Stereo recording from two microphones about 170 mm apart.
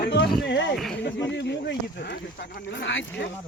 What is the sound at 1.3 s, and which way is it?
Speech, 90° left.